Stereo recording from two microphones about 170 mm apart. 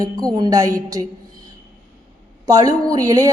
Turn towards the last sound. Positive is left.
turn(degrees=-20)  # may be behind; listen again after turning